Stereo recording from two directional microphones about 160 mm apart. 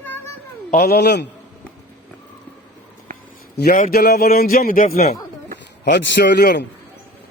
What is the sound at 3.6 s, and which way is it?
A man's voice, 60° left (ahead or behind).